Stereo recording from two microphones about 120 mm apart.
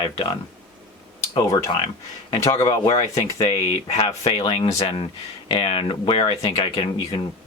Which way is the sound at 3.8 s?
50° left (ahead or behind).